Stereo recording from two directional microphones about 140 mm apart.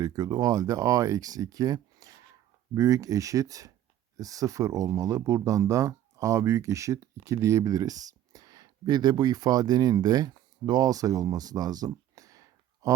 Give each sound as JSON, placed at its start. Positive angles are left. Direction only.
{"t": 0.0, "sound": "speech", "side_deg": -25}